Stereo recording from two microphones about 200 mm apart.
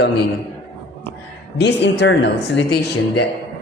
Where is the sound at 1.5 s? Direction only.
60° left (ahead or behind).